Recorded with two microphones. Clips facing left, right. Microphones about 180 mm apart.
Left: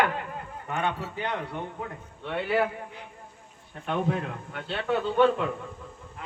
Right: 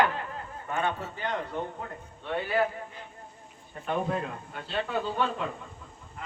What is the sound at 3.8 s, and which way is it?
A man's voice, 70° left (ahead or behind).